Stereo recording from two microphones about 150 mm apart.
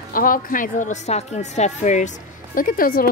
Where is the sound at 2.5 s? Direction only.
70° left (ahead or behind).